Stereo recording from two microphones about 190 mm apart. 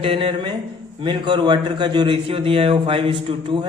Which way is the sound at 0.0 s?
30° right (ahead or behind).